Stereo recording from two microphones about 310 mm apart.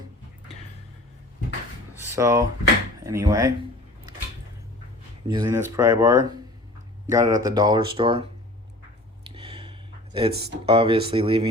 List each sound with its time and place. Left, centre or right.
2.1 s speech: centre
5.3 s speech: centre
9.3 s a sound: centre
10.7 s speech: centre